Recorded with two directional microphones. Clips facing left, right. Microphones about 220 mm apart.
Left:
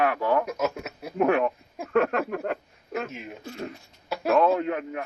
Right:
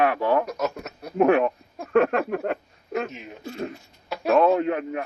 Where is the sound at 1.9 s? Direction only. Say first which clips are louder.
Right 3 dB; 25° right (ahead or behind).